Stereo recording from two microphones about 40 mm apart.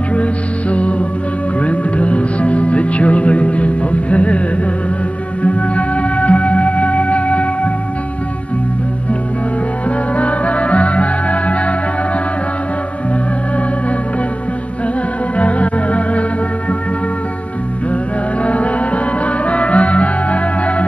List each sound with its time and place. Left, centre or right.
0.1 s music: left
5.4 s music: left
10.1 s music: left
15.3 s music: left
18.4 s music: left